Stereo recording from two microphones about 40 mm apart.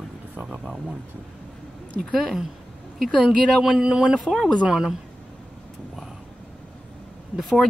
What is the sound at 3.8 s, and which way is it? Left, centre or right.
Speech, centre.